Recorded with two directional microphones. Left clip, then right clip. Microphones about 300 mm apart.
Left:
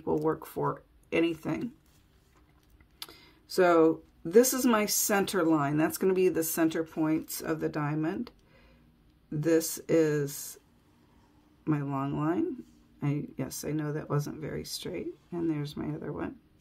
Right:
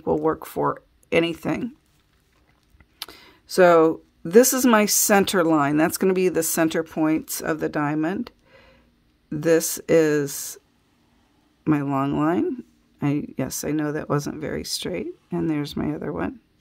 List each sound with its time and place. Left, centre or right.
0.0 s speech: right
3.0 s speech: right
11.6 s speech: right